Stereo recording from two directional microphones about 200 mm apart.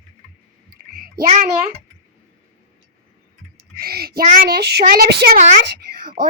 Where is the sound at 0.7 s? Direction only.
45° right (ahead or behind).